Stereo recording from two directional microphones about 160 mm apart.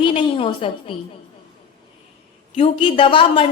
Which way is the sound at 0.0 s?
35° left (ahead or behind).